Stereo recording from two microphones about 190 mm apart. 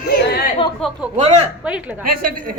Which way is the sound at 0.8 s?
Centre (ahead or behind).